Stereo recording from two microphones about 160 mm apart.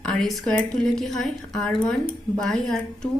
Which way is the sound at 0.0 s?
5° left (ahead or behind).